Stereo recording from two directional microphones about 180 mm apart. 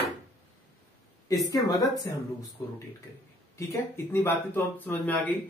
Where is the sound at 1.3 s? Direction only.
20° left (ahead or behind).